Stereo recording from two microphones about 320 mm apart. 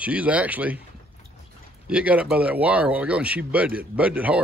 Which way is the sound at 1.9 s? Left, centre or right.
Centre.